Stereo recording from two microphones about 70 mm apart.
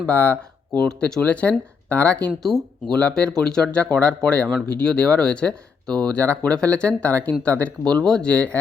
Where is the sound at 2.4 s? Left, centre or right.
Centre.